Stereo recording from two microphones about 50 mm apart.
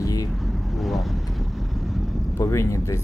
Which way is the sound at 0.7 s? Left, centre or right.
Centre.